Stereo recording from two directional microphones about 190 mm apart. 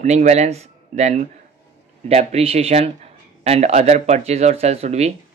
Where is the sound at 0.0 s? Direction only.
35° right (ahead or behind).